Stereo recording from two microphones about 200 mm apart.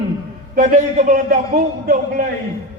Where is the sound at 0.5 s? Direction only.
40° right (ahead or behind).